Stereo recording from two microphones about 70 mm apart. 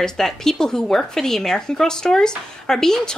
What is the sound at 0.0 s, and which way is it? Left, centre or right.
A woman's voice, centre.